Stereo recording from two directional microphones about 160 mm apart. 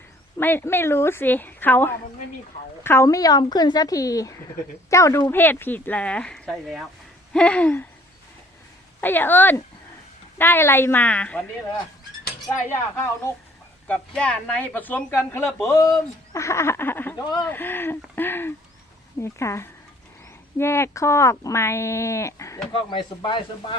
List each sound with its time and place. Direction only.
0.3 s speech: 15° left (ahead or behind)
9.0 s speech: 10° left (ahead or behind)
12.6 s speech: 15° left (ahead or behind)
22.9 s speech: 30° left (ahead or behind)